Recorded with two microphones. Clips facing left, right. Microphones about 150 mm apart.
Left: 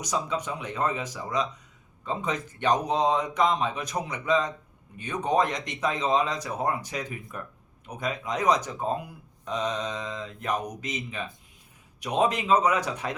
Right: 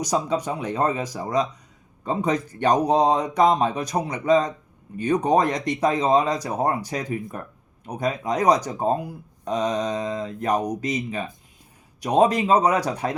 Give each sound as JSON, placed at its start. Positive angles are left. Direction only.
{"t": 0.0, "sound": "speech", "side_deg": -35}